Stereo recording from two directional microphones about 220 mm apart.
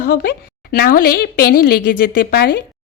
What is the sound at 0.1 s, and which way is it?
A woman's voice, 45° left (ahead or behind).